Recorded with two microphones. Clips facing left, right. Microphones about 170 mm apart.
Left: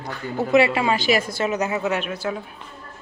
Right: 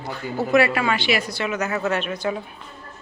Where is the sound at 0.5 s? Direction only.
25° left (ahead or behind).